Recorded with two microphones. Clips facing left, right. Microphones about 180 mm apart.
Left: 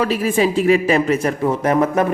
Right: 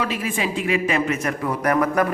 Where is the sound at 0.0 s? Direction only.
40° left (ahead or behind).